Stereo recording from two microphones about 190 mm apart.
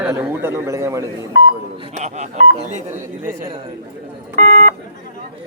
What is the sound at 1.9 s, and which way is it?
Speech, 35° right (ahead or behind).